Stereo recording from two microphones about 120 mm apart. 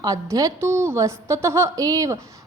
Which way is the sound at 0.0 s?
30° right (ahead or behind).